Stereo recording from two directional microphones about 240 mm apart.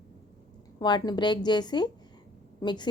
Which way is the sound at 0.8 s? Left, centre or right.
Centre.